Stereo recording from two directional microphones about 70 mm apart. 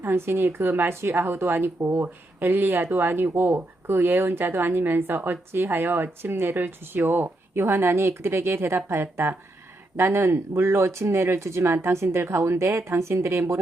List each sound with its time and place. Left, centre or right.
0.0 s a woman's voice: right